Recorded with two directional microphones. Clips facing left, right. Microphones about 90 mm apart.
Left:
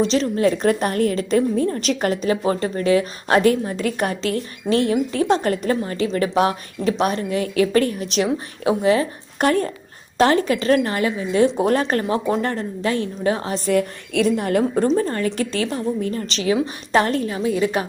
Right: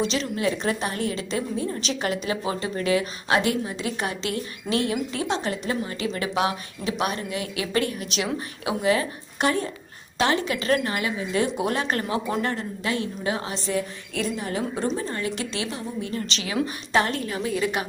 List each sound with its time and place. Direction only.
0.0 s a woman's voice: 40° left (ahead or behind)
9.4 s speech: 50° left (ahead or behind)
10.2 s a woman's voice: 40° left (ahead or behind)
13.7 s a woman's voice: 75° left (ahead or behind); by 14.8 s 60° left (ahead or behind)
14.8 s a woman's voice: 50° left (ahead or behind); by 17.8 s 35° left (ahead or behind)